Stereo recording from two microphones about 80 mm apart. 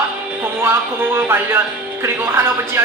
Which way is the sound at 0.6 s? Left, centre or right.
Right.